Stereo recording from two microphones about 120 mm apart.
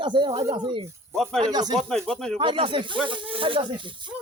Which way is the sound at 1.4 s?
35° right (ahead or behind).